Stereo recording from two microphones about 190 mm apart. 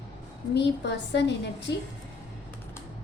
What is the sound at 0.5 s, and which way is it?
A woman's voice, 65° left (ahead or behind).